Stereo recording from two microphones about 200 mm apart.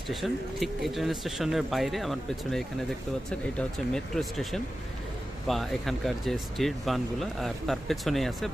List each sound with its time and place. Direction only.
0.1 s speech: centre (ahead or behind)